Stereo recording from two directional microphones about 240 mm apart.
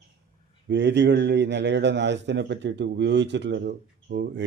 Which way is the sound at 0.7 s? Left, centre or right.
Right.